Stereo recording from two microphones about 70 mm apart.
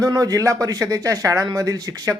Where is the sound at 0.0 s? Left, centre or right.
Right.